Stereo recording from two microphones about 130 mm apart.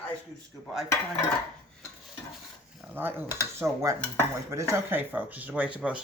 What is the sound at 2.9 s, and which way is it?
Cutlery, 15° right (ahead or behind).